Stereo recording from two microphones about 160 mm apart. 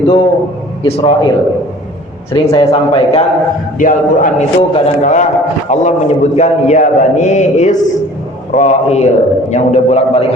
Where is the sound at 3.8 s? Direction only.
55° left (ahead or behind).